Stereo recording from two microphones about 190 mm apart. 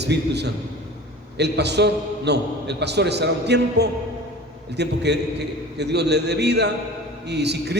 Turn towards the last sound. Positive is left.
turn(degrees=-60)  # may be behind; listen again after turning